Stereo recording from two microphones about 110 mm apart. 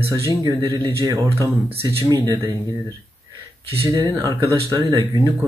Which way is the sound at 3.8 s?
30° right (ahead or behind).